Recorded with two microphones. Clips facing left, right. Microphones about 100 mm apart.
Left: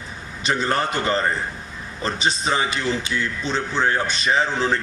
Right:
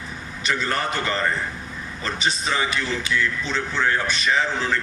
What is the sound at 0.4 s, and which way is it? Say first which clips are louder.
A man's voice: left 3 dB; 25° left (ahead or behind).